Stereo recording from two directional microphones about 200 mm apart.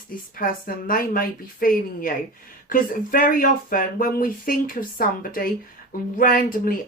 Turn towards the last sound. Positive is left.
turn(degrees=45)  # may be behind; listen again after turning